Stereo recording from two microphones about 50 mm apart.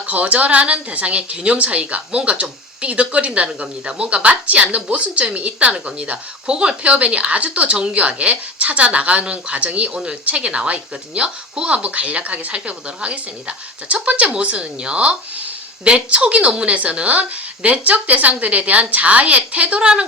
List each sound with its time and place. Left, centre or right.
0.1 s a woman's voice: right